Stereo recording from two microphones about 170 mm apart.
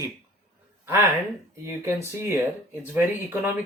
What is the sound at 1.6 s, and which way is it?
Speech, 15° right (ahead or behind).